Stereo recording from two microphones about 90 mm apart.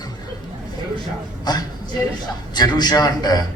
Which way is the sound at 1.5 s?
50° left (ahead or behind).